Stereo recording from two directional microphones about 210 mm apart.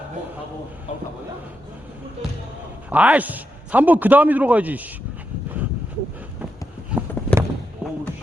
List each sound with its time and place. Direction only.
0.9 s speech: 30° left (ahead or behind)
2.9 s a man's voice: 5° right (ahead or behind)
6.9 s clip-clop: 5° right (ahead or behind)
7.3 s basketball bounce: 5° left (ahead or behind)